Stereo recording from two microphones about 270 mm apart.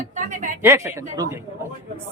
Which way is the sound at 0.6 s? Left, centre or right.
Centre.